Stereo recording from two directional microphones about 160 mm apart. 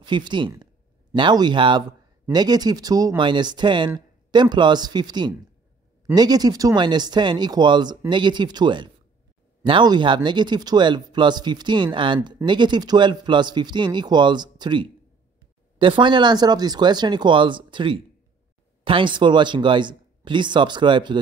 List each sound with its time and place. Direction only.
0.0 s speech: 30° right (ahead or behind)